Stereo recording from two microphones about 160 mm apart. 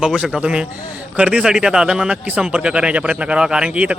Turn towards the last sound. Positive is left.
turn(degrees=-5)  # may be behind; listen again after turning